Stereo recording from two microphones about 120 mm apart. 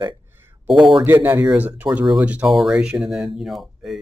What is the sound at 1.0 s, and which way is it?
Speech, 15° right (ahead or behind).